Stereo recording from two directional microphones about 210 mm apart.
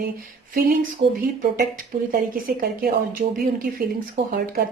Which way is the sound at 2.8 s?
40° right (ahead or behind).